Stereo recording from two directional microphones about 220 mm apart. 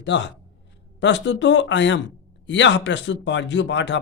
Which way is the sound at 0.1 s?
55° left (ahead or behind).